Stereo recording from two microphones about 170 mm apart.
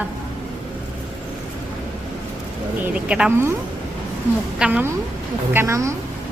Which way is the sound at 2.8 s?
5° right (ahead or behind).